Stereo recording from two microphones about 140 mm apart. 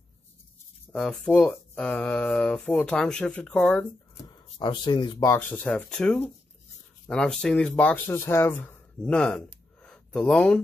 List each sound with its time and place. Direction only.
0.9 s speech: 5° left (ahead or behind)
4.3 s speech: 30° left (ahead or behind)
5.2 s speech: 15° left (ahead or behind)